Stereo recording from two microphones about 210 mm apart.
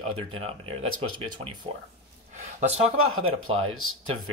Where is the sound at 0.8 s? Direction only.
85° right.